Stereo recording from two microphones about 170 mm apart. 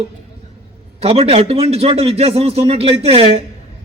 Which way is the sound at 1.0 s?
35° right (ahead or behind).